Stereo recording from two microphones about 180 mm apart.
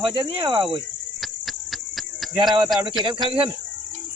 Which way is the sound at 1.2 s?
Centre (ahead or behind).